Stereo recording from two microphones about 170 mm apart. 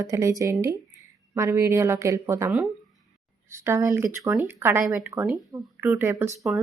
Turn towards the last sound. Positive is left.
turn(degrees=-5)  # may be behind; listen again after turning